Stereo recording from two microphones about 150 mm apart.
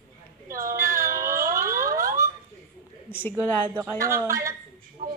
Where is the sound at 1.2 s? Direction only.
70° right (ahead or behind).